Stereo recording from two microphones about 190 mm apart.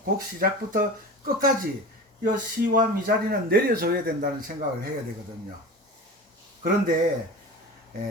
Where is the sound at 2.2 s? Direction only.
50° right (ahead or behind).